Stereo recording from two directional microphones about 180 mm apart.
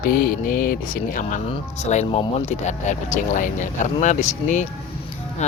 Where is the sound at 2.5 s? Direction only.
40° left (ahead or behind).